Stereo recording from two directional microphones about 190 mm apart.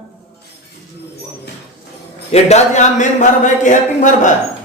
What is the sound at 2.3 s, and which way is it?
Speech, 35° left (ahead or behind).